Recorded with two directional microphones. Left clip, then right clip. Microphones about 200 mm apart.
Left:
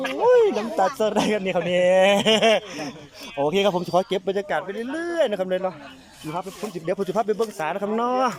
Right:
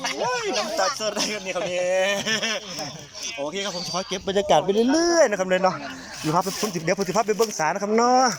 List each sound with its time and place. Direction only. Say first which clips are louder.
0.3 s speech: left 12 dB; 35° left (ahead or behind)
4.4 s speech: right 8 dB; 10° right (ahead or behind)
5.3 s speech: right 3 dB; 10° left (ahead or behind)